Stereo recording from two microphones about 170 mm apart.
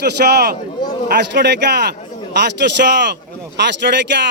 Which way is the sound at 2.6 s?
90° right.